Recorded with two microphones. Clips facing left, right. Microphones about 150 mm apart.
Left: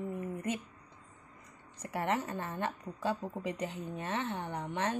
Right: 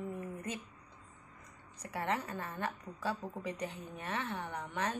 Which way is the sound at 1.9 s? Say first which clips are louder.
Left 3 dB; 30° left (ahead or behind).